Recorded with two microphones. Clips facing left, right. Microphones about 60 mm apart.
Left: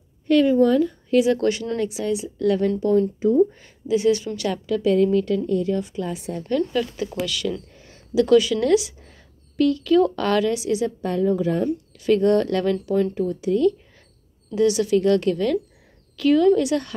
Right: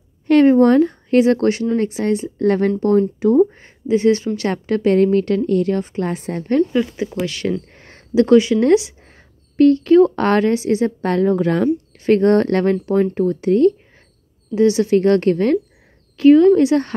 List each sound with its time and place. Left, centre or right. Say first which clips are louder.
0.3 s speech: right 5 dB; right
3.2 s speech: right 5 dB; right
3.4 s speech: right 5 dB; right
4.5 s a woman's voice: right 3 dB; right
5.9 s speech: right 5 dB; right
6.7 s speech: right 5 dB; right
7.2 s speech: right 4 dB; right
7.6 s speech: right 4 dB; right
11.1 s a woman's voice: right 4 dB; right
12.0 s speech: right 4 dB; right
14.5 s speech: right 4 dB; right
16.2 s speech: right 7 dB; right